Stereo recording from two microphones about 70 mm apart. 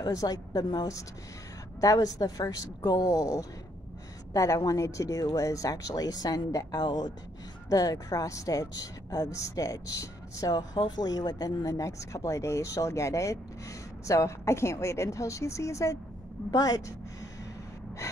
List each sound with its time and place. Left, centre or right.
0.1 s speech: left
1.8 s speech: left
7.7 s speech: left
10.5 s speech: left
16.4 s speech: left